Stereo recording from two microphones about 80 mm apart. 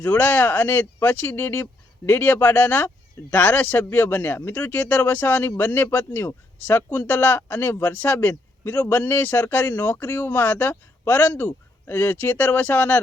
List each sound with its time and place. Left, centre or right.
0.0 s speech: left